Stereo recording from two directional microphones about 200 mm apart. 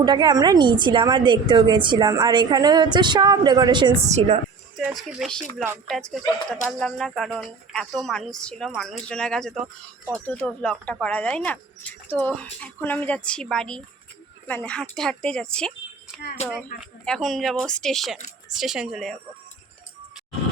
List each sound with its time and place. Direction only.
0.0 s a woman's voice: 20° right (ahead or behind)
4.8 s a woman's voice: centre (ahead or behind)
17.1 s a woman's voice: centre (ahead or behind)